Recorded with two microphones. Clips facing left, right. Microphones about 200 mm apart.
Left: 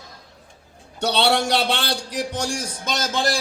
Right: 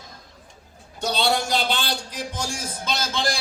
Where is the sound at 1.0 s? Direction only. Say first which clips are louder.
Left 3 dB; 70° left (ahead or behind).